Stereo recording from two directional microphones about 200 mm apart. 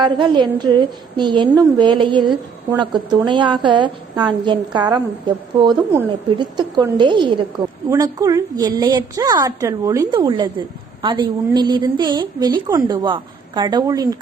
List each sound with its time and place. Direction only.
0.0 s a woman's voice: 20° right (ahead or behind)